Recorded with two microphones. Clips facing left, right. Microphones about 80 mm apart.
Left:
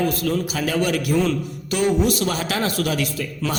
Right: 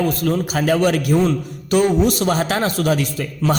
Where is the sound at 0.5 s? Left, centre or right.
Right.